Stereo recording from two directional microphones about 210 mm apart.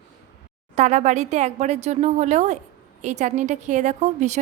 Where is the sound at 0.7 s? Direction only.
35° right (ahead or behind).